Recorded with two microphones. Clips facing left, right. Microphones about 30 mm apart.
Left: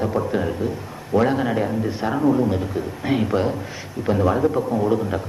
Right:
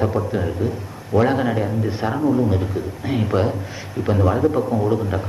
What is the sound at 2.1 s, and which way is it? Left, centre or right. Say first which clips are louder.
Speech: left 1 dB; centre.